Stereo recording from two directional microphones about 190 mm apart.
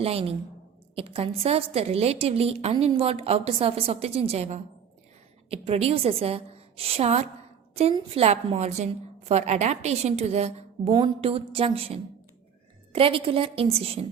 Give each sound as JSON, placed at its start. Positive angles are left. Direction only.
{"t": 0.0, "sound": "a woman's voice", "side_deg": -30}